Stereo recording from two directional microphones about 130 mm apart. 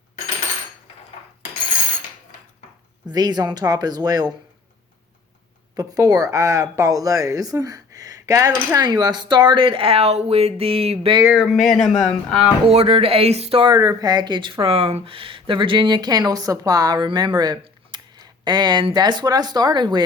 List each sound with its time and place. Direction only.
3.1 s speech: 30° right (ahead or behind)
5.7 s speech: 30° right (ahead or behind); by 11.1 s 50° right (ahead or behind)
11.3 s speech: 5° right (ahead or behind)
12.6 s speech: 50° right (ahead or behind)
13.7 s speech: 30° right (ahead or behind)